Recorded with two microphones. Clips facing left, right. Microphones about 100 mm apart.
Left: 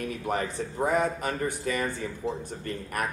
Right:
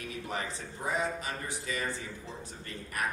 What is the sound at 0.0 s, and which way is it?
A man's voice, 50° left (ahead or behind).